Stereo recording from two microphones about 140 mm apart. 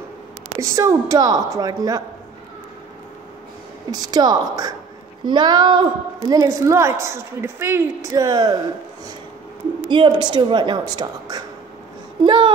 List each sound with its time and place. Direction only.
0.6 s a woman's voice: 20° right (ahead or behind)
3.9 s a woman's voice: 30° right (ahead or behind)
8.1 s a woman's voice: 30° right (ahead or behind)
9.8 s a woman's voice: 35° right (ahead or behind)